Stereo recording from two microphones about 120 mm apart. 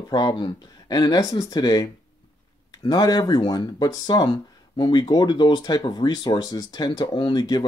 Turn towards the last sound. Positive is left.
turn(degrees=35)  # may be behind; listen again after turning